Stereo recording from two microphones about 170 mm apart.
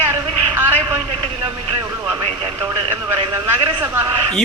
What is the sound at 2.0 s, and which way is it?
Radio, 30° right (ahead or behind).